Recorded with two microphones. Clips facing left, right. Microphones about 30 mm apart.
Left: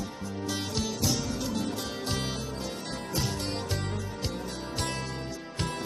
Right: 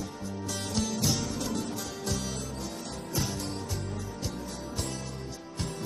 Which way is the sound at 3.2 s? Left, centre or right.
Left.